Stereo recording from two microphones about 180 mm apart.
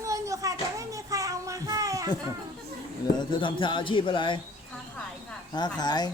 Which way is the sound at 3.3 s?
25° left (ahead or behind).